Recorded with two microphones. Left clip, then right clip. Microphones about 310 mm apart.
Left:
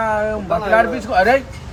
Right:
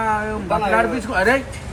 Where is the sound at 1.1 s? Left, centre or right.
Left.